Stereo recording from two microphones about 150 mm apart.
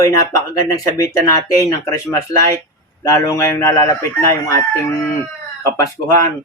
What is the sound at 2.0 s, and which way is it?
Speech, 20° left (ahead or behind).